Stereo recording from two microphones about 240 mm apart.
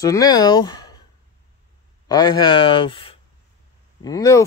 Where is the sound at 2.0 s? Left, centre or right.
Centre.